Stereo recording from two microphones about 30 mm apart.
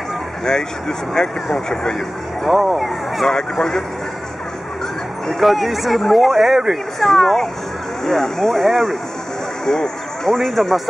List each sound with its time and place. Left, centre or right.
0.5 s speech: centre
2.4 s speech: centre
3.3 s speech: centre
5.4 s speech: centre
7.0 s speech: centre
9.7 s speech: centre